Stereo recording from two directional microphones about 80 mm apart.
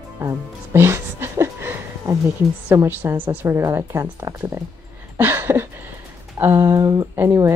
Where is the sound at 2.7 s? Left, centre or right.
Right.